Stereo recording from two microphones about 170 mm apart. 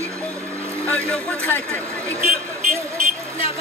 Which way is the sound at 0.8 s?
10° left (ahead or behind).